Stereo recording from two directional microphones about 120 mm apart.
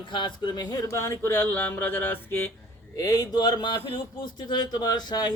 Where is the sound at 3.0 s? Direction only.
30° left (ahead or behind).